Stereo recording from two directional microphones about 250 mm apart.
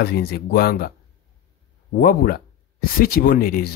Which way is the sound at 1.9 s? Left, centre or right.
Left.